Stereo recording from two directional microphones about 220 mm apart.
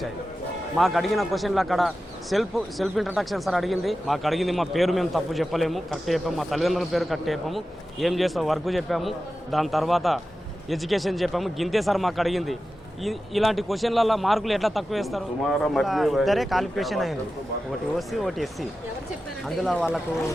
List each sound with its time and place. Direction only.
0.8 s speech: centre (ahead or behind)
19.5 s speech: centre (ahead or behind)